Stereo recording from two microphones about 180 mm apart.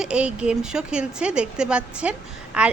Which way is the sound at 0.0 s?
5° right (ahead or behind).